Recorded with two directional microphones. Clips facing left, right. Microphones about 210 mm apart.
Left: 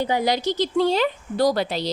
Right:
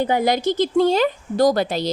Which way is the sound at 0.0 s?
50° right (ahead or behind).